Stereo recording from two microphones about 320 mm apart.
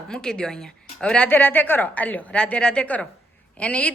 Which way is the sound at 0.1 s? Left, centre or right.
Centre.